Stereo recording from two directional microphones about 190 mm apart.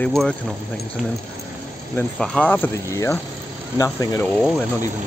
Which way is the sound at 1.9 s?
5° left (ahead or behind).